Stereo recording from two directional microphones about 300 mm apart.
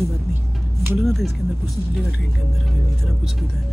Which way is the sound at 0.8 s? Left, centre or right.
Centre.